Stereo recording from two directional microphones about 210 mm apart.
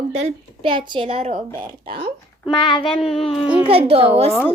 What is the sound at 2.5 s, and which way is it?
Child singing, 20° left (ahead or behind).